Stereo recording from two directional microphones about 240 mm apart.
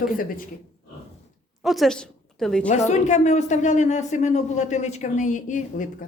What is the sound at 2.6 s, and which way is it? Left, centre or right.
A woman's voice, left.